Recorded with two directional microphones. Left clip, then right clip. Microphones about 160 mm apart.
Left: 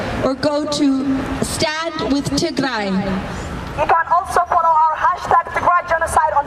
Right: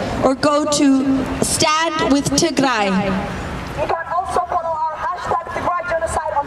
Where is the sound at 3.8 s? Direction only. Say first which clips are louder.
Left 6 dB; 25° left (ahead or behind).